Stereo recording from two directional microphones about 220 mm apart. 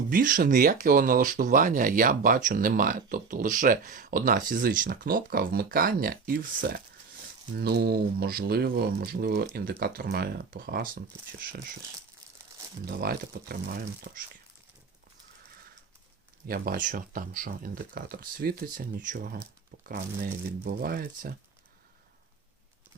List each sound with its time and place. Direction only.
0.1 s speech: 35° right (ahead or behind)
12.8 s speech: 45° right (ahead or behind)
16.5 s speech: 40° right (ahead or behind)